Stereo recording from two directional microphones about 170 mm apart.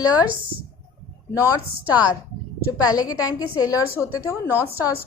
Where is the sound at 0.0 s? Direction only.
25° left (ahead or behind).